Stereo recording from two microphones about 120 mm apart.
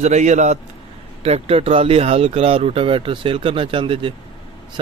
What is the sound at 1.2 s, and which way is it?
Speech, 55° right (ahead or behind).